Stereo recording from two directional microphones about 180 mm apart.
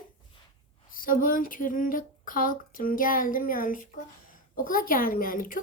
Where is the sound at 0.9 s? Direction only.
50° left (ahead or behind).